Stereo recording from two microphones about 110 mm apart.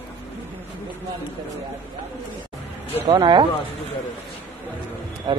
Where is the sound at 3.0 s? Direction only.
40° right (ahead or behind).